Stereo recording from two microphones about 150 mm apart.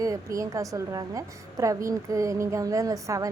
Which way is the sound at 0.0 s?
20° right (ahead or behind).